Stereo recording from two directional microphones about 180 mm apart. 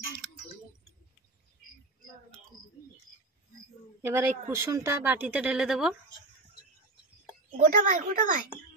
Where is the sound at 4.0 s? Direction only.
15° right (ahead or behind).